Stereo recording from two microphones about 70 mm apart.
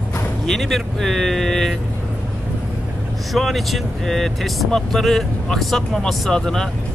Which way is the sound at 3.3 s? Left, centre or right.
Centre.